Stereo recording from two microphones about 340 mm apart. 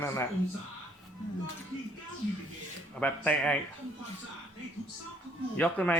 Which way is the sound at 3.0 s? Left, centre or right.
Centre.